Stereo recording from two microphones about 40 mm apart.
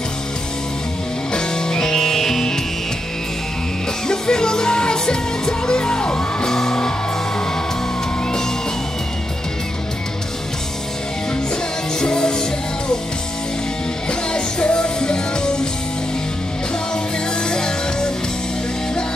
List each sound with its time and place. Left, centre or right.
1.3 s music: centre
4.1 s music: centre
12.0 s music: centre
14.3 s music: left
16.9 s music: centre